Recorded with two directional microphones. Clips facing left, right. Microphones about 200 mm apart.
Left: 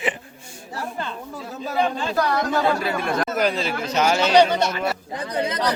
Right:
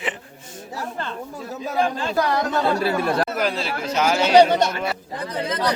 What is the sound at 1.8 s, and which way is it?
Speech, centre (ahead or behind).